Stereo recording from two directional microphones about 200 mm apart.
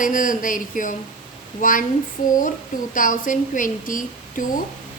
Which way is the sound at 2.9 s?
40° left (ahead or behind).